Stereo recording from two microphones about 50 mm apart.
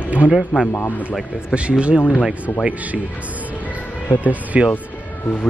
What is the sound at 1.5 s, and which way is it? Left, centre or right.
Speech, right.